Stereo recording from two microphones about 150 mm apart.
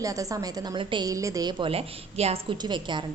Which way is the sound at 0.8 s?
35° right (ahead or behind).